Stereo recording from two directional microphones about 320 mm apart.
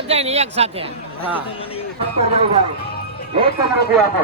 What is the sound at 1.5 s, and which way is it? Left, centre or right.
Speech, centre.